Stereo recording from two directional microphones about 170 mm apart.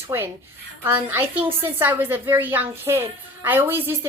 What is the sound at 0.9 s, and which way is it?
A woman's voice, 15° right (ahead or behind).